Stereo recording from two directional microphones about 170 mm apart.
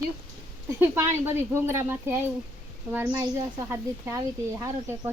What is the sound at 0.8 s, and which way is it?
Speech, 15° right (ahead or behind).